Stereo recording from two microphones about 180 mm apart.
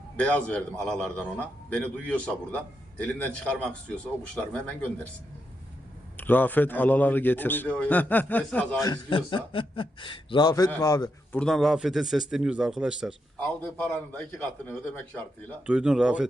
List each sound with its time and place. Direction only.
0.2 s a man's voice: 5° left (ahead or behind)
6.1 s a man's voice: 10° left (ahead or behind)
8.8 s a man's voice: 25° left (ahead or behind)
11.3 s a man's voice: 5° left (ahead or behind)
13.4 s a man's voice: 5° left (ahead or behind)
15.6 s a man's voice: 5° right (ahead or behind)